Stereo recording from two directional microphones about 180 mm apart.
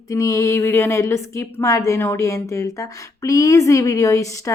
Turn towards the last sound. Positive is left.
turn(degrees=15)  # may be behind; listen again after turning